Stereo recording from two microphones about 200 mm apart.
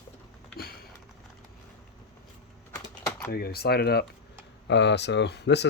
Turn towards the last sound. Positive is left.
turn(degrees=55)  # may be behind; listen again after turning